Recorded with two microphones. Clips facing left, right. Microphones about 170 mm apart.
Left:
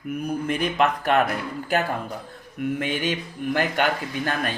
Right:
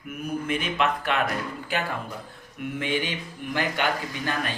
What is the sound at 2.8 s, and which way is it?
Speech, 50° left (ahead or behind).